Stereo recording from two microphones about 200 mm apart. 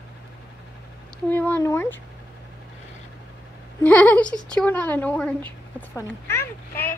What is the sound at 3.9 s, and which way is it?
A woman's voice, 5° left (ahead or behind).